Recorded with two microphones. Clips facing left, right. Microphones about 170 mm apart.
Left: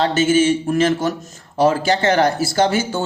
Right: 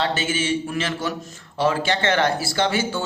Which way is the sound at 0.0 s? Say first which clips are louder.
Left 9 dB; 45° left (ahead or behind).